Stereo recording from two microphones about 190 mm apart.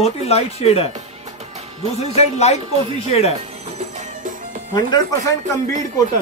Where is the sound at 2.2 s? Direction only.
35° left (ahead or behind).